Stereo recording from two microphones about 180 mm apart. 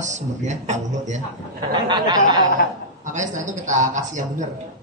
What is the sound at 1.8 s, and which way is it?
Speech, 25° right (ahead or behind).